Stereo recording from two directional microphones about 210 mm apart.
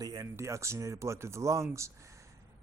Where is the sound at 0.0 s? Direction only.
15° right (ahead or behind).